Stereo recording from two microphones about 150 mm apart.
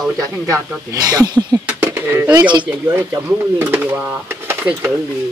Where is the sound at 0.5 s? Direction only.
25° right (ahead or behind).